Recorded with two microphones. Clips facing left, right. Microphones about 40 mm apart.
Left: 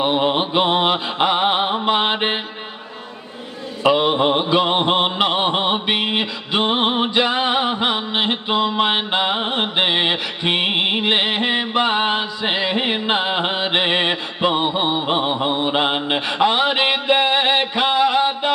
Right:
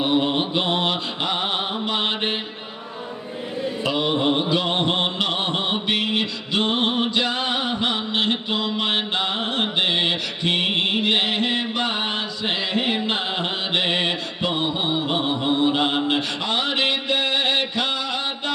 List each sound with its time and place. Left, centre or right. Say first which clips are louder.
0.0 s mantra: left 3 dB; left
3.8 s mantra: left 6 dB; left